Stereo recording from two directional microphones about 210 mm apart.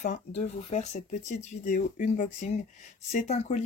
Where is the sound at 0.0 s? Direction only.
35° left (ahead or behind).